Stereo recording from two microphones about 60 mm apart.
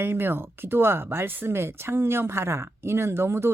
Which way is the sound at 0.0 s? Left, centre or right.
Right.